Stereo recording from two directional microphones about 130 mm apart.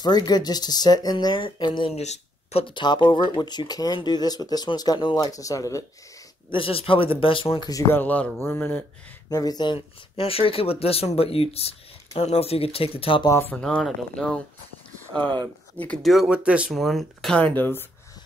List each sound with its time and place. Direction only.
0.0 s speech: 30° left (ahead or behind)
2.0 s a sound: 55° left (ahead or behind)
2.6 s speech: 35° left (ahead or behind)
6.5 s speech: 45° left (ahead or behind)
7.9 s speech: 15° left (ahead or behind)
9.3 s speech: 30° left (ahead or behind)
13.3 s speech: 15° left (ahead or behind)
13.6 s speech: 5° left (ahead or behind)
15.8 s speech: 5° left (ahead or behind)